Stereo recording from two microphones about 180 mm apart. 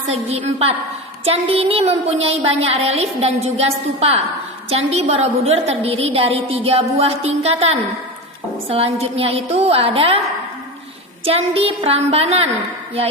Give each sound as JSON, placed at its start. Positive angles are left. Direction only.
{"t": 0.1, "sound": "a woman's voice", "side_deg": -35}
{"t": 11.3, "sound": "a woman's voice", "side_deg": -35}